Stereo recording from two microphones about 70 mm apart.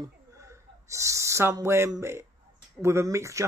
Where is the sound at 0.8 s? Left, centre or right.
Right.